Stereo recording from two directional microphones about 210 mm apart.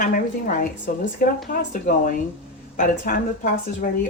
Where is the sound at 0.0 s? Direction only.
40° left (ahead or behind).